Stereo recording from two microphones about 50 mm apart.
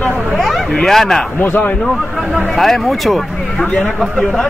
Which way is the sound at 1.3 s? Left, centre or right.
Left.